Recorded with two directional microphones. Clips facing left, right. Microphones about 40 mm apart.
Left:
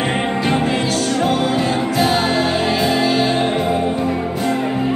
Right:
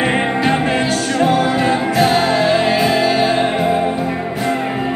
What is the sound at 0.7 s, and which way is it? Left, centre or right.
Music, right.